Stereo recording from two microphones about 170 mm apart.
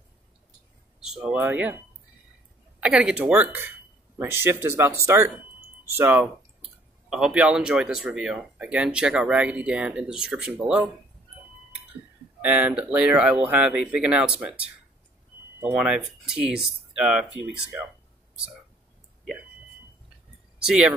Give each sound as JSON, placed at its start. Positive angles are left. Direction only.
{"t": 1.0, "sound": "speech", "side_deg": -5}
{"t": 2.8, "sound": "speech", "side_deg": -5}
{"t": 12.4, "sound": "speech", "side_deg": -10}
{"t": 20.6, "sound": "speech", "side_deg": -5}